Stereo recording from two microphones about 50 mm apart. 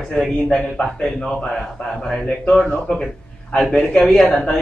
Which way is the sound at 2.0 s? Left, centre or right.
Centre.